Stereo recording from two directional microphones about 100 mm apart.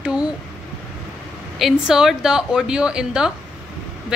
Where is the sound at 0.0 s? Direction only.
10° right (ahead or behind).